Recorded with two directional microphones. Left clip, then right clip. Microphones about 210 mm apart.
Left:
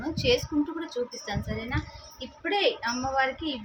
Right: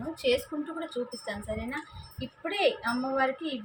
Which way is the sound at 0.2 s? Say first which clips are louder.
Left 2 dB; 15° left (ahead or behind).